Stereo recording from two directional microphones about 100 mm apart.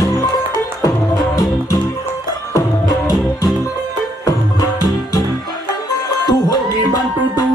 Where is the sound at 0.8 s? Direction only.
40° left (ahead or behind).